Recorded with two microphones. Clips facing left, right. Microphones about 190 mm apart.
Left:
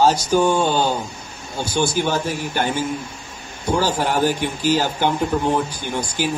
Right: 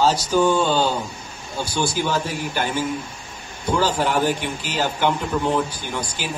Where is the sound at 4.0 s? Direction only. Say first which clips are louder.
Left 1 dB; 40° left (ahead or behind).